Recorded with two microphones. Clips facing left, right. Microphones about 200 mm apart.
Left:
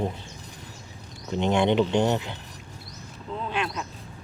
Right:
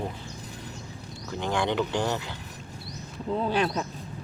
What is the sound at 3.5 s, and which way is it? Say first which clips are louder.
Speech: right 3 dB; 35° right (ahead or behind).